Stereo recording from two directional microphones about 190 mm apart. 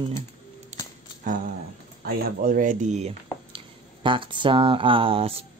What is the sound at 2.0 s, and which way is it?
Speech, 50° right (ahead or behind).